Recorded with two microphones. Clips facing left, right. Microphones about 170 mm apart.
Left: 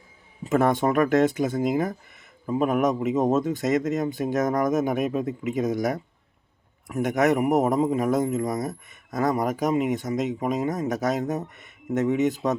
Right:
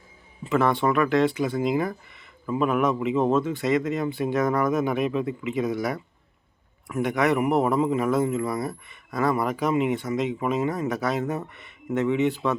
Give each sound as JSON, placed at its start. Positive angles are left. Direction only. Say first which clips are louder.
{"t": 0.4, "sound": "a man's voice", "louder": "left 1 dB", "side_deg": 45}